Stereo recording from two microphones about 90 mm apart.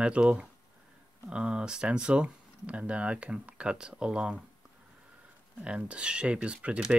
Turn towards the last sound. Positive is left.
turn(degrees=-10)  # may be behind; listen again after turning